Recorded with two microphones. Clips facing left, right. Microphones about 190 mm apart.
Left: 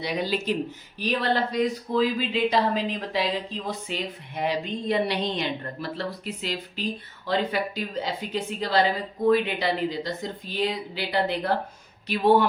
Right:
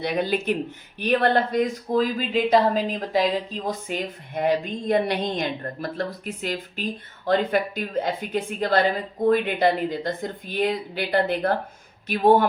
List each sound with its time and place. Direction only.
0.0 s speech: 55° right (ahead or behind)